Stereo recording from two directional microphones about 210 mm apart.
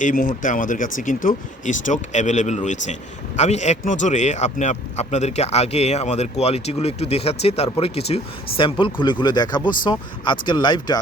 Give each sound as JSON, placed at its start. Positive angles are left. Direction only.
{"t": 0.0, "sound": "speech", "side_deg": 40}